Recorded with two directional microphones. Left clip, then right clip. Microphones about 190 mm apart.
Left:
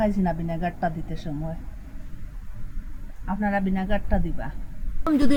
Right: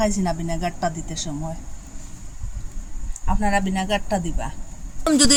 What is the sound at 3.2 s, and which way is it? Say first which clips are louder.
Speech: right 4 dB; 25° right (ahead or behind).